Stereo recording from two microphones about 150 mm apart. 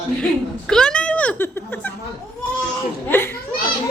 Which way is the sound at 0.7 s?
5° left (ahead or behind).